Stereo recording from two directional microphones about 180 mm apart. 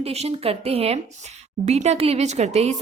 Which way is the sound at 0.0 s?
35° right (ahead or behind).